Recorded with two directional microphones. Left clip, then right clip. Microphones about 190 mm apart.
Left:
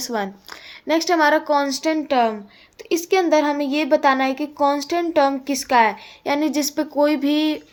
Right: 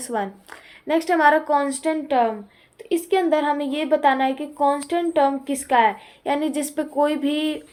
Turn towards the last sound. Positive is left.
turn(degrees=30)  # may be behind; listen again after turning